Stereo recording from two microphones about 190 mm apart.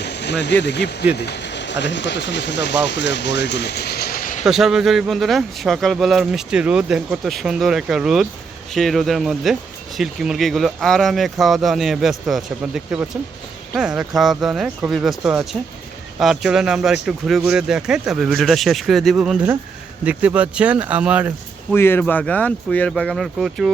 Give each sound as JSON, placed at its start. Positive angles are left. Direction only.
{"t": 0.0, "sound": "a sound", "side_deg": 65}
{"t": 0.6, "sound": "speech", "side_deg": 65}
{"t": 4.4, "sound": "speech", "side_deg": 0}
{"t": 21.7, "sound": "speech", "side_deg": 10}